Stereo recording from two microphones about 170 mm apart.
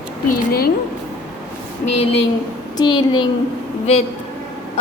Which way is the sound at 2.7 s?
25° left (ahead or behind).